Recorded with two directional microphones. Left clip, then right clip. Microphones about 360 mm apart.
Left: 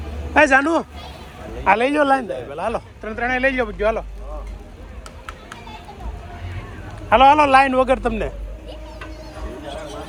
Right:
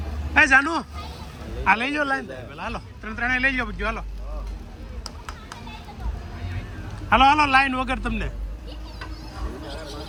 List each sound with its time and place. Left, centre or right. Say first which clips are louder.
0.3 s a man's voice: left 3 dB; centre
5.0 s a sound: left 2 dB; right
7.1 s a man's voice: left 5 dB; centre